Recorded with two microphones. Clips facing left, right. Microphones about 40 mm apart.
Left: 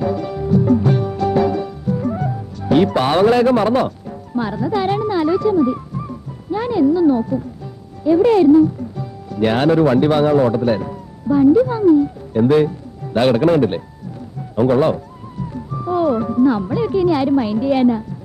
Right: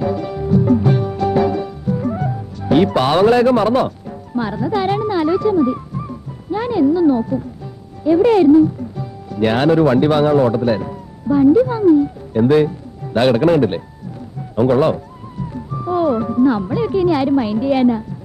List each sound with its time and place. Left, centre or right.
0.0 s music: centre
3.2 s a man's voice: right
4.4 s speech: right
8.9 s music: centre
9.5 s speech: right
10.0 s a man's voice: right
10.6 s a man's voice: centre
15.3 s speech: centre